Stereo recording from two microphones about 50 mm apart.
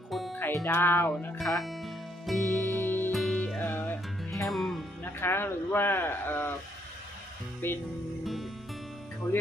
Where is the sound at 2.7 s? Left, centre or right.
Left.